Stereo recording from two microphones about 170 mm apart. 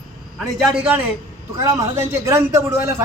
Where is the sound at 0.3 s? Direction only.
Centre (ahead or behind).